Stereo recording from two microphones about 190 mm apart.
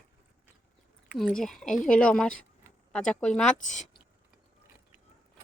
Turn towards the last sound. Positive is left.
turn(degrees=40)  # may be behind; listen again after turning